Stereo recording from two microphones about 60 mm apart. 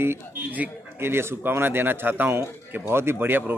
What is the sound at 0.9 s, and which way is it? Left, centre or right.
A man's voice, right.